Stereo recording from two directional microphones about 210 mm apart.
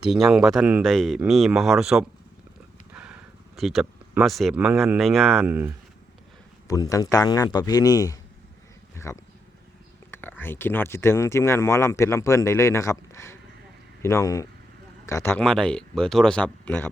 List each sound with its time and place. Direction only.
0.0 s speech: 5° right (ahead or behind)
2.9 s a sound: 5° right (ahead or behind)
4.9 s speech: centre (ahead or behind)
5.5 s speech: 10° right (ahead or behind)
6.7 s speech: 15° left (ahead or behind)